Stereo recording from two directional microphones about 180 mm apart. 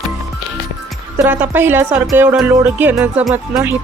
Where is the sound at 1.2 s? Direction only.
10° right (ahead or behind).